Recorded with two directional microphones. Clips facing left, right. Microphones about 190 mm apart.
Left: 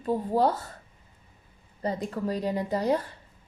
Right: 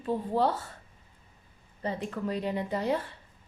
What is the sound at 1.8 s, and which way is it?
A woman's voice, 40° left (ahead or behind).